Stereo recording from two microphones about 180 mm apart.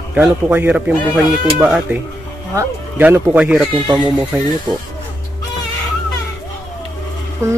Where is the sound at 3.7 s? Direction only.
25° right (ahead or behind).